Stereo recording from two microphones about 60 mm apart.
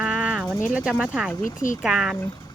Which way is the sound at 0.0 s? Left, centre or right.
Centre.